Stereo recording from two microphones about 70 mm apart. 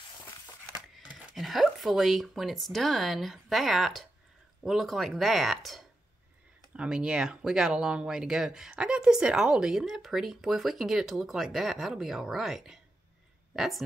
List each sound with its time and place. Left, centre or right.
1.1 s speech: centre
6.7 s speech: centre